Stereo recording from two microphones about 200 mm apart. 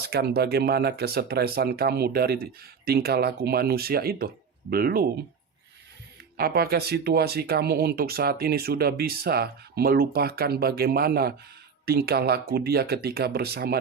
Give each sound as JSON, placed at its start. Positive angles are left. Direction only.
{"t": 0.0, "sound": "speech", "side_deg": -50}
{"t": 6.3, "sound": "speech", "side_deg": -50}